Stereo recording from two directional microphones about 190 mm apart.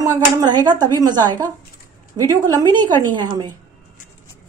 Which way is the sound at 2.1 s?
20° right (ahead or behind).